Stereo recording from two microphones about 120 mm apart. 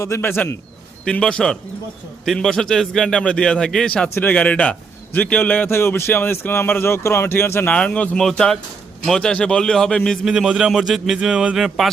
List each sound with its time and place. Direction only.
0.0 s a man's voice: 20° left (ahead or behind)
1.0 s a man's voice: 5° left (ahead or behind)
10.3 s speech: 5° right (ahead or behind)